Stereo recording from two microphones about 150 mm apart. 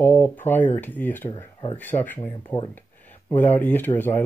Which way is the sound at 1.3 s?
35° left (ahead or behind).